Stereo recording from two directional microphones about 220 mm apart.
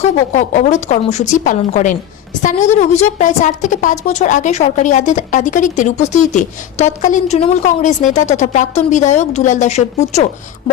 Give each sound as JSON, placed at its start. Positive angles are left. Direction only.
{"t": 0.0, "sound": "a woman's voice", "side_deg": 35}